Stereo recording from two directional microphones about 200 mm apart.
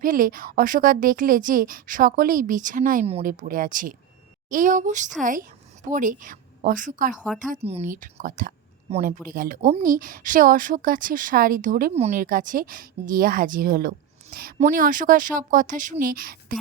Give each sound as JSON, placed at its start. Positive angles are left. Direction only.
{"t": 0.0, "sound": "a woman's voice", "side_deg": -45}
{"t": 7.5, "sound": "speech", "side_deg": -30}
{"t": 7.9, "sound": "a woman's voice", "side_deg": -40}